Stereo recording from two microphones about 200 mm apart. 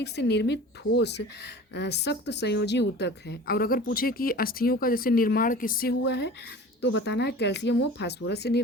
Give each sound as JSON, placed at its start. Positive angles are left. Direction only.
{"t": 0.0, "sound": "a woman's voice", "side_deg": 55}